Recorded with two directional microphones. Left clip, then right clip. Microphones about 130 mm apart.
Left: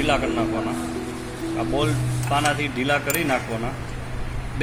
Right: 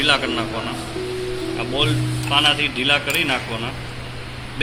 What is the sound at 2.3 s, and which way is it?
Speech, 35° left (ahead or behind).